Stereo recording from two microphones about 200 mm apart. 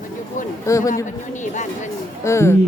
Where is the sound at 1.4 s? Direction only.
35° left (ahead or behind).